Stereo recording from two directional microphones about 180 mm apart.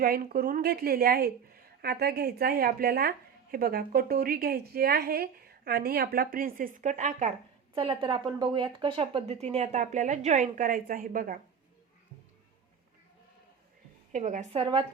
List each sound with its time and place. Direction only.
0.0 s a woman's voice: 55° right (ahead or behind)
7.8 s speech: 30° right (ahead or behind); by 11.3 s 50° right (ahead or behind)
14.1 s speech: 40° right (ahead or behind)